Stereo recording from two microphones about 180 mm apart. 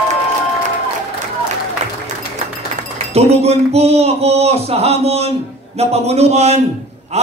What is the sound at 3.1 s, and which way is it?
Speech, 35° right (ahead or behind).